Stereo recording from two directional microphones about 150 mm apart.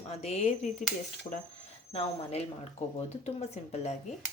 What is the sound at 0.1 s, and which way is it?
Speech, 45° left (ahead or behind).